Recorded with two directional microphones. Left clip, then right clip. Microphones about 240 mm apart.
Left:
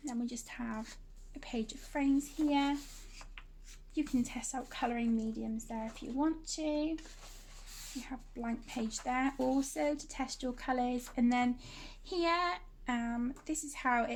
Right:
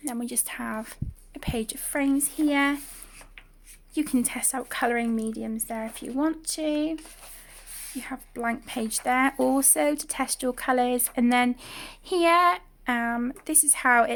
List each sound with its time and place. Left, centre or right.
0.0 s a woman's voice: right
3.9 s speech: right
8.0 s speech: right